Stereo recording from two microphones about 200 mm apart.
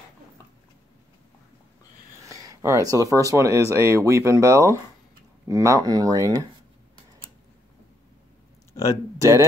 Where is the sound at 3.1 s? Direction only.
15° right (ahead or behind).